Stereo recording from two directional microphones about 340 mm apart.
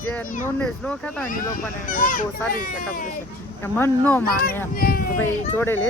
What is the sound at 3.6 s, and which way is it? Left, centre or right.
Speech, centre.